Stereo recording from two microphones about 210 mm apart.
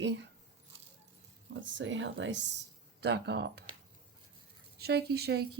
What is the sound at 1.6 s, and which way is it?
Speech, 60° right (ahead or behind).